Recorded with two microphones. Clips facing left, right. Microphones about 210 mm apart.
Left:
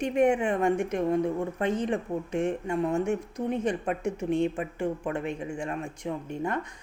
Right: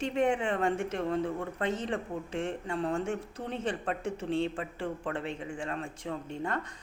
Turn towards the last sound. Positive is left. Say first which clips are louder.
# left 3 dB
turn(degrees=15)  # may be behind; listen again after turning